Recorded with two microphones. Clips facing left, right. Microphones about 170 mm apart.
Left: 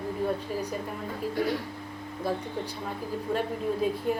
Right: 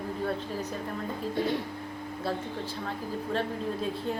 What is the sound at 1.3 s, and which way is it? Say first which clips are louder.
Speech: even; 25° right (ahead or behind).